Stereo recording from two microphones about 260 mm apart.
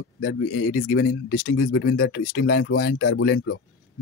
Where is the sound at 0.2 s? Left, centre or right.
Left.